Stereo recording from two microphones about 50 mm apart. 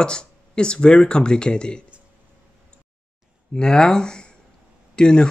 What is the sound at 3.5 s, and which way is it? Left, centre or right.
Speech, centre.